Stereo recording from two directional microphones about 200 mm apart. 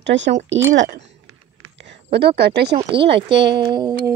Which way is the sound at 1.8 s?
55° right (ahead or behind).